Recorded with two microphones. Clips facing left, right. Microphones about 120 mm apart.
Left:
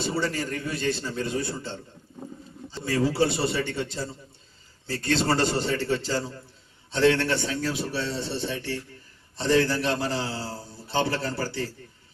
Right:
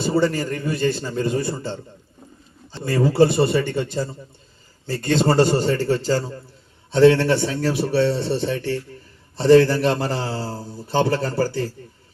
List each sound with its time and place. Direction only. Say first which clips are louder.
0.0 s a man's voice: right 8 dB; 50° right (ahead or behind)